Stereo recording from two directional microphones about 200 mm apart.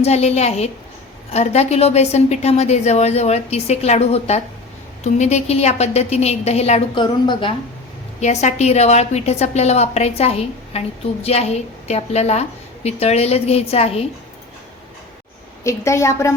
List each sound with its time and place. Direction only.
0.0 s a woman's voice: 30° left (ahead or behind)
8.2 s a woman's voice: 35° left (ahead or behind)
15.6 s a woman's voice: 15° left (ahead or behind)